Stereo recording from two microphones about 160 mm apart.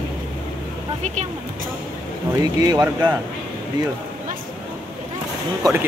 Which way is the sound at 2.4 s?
20° right (ahead or behind).